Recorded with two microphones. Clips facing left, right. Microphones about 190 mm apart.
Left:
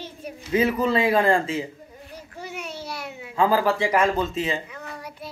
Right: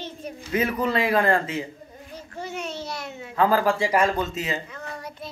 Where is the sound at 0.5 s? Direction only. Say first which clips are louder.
Left 3 dB; 25° left (ahead or behind).